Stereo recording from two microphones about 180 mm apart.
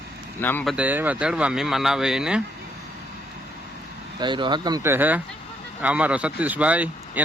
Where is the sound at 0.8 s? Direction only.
10° right (ahead or behind).